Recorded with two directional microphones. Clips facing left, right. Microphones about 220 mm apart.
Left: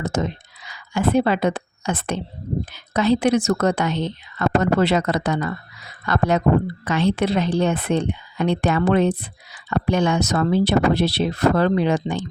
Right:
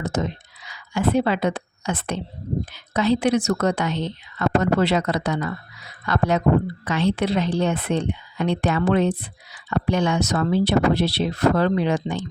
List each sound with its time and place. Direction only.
0.9 s a woman's voice: 50° left (ahead or behind)